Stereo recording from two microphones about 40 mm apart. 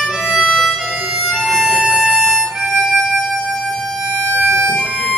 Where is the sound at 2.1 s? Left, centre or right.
Centre.